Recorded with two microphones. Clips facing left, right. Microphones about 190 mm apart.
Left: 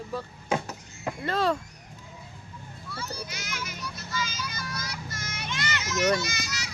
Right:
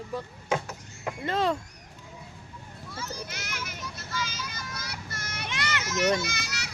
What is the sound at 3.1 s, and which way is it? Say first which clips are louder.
Children playing: left 1 dB; 55° right (ahead or behind).